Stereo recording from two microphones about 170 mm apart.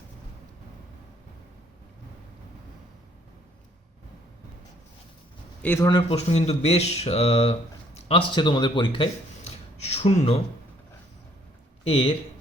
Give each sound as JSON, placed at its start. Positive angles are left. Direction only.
{"t": 5.6, "sound": "speech", "side_deg": 15}
{"t": 5.9, "sound": "speech", "side_deg": 25}
{"t": 6.1, "sound": "speech", "side_deg": 40}
{"t": 11.9, "sound": "speech", "side_deg": 35}